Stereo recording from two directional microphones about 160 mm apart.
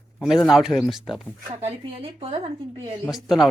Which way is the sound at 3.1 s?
Centre (ahead or behind).